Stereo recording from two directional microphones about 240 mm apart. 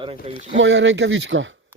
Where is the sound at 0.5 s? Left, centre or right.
Right.